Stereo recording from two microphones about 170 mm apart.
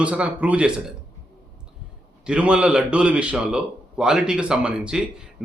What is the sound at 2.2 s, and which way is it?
A man's voice, 5° right (ahead or behind).